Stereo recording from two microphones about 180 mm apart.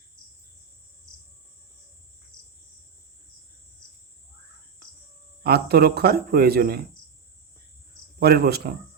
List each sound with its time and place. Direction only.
5.4 s speech: 60° right (ahead or behind)
8.2 s speech: 60° right (ahead or behind)